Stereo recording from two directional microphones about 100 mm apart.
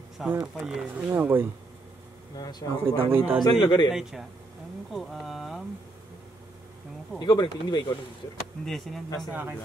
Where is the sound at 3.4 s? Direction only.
45° left (ahead or behind).